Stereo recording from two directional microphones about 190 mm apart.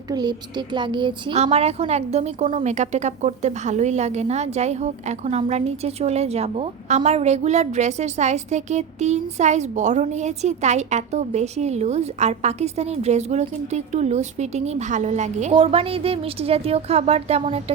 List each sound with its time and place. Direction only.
0.1 s speech: 20° right (ahead or behind)